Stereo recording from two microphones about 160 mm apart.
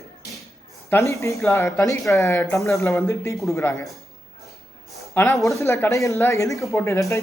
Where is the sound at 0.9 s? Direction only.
20° left (ahead or behind).